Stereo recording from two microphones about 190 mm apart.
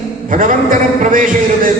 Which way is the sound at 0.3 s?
45° right (ahead or behind).